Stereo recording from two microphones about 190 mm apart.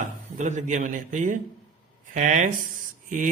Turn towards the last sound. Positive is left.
turn(degrees=-45)  # may be behind; listen again after turning